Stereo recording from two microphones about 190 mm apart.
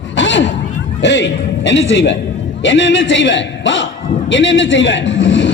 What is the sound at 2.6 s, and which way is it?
A man's voice, 75° left (ahead or behind).